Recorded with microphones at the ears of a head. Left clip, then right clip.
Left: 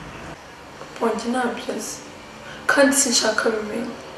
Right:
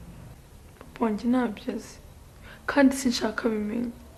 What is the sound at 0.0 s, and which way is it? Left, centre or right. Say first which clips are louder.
Vehicle: left 16 dB; left.